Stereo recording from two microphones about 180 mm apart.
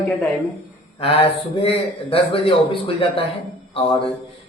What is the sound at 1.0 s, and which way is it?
Speech, 30° left (ahead or behind).